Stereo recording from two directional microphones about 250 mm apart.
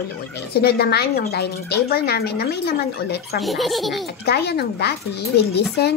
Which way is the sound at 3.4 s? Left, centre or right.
Centre.